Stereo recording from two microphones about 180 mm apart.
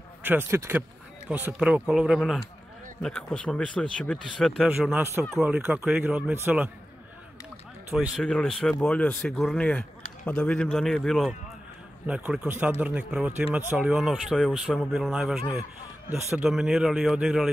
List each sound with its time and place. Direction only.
0.2 s a man's voice: 10° right (ahead or behind)
4.7 s speech: 10° right (ahead or behind)
8.2 s a man's voice: 5° left (ahead or behind)
16.1 s speech: 15° right (ahead or behind)
16.4 s a man's voice: centre (ahead or behind)